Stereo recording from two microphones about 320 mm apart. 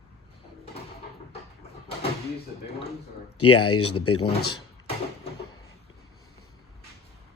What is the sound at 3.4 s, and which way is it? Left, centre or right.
Speech, left.